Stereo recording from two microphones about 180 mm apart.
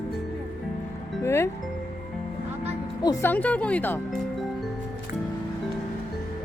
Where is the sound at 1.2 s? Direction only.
15° left (ahead or behind).